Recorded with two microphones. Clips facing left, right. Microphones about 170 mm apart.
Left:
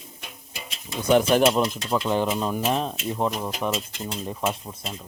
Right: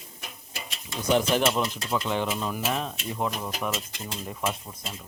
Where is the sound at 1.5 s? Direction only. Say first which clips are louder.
Left 5 dB; 35° left (ahead or behind).